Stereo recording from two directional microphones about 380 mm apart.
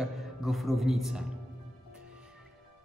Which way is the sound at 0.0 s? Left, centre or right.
Centre.